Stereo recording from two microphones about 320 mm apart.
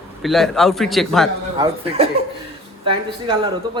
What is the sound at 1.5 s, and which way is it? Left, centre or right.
Speech, centre.